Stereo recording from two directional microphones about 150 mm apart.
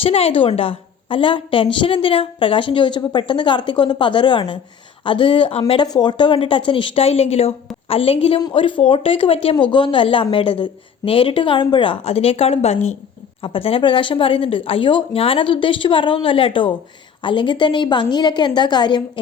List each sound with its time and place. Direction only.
0.0 s a woman's voice: 40° left (ahead or behind)
13.4 s a woman's voice: 40° left (ahead or behind)